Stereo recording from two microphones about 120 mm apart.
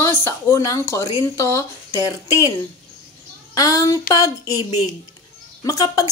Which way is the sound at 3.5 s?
30° left (ahead or behind).